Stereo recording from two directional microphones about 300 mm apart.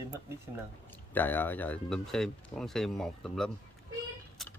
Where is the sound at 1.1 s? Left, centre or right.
Centre.